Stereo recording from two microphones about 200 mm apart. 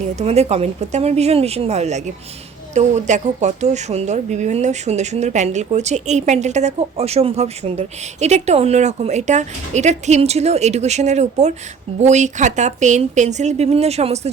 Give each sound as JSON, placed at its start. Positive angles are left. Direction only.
{"t": 0.2, "sound": "speech", "side_deg": -30}